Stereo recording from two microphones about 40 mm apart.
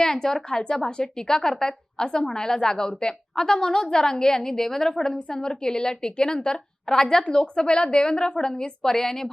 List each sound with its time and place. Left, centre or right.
0.0 s a woman's voice: centre